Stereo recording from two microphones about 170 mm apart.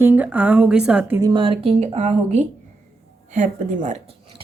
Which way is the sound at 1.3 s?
30° right (ahead or behind).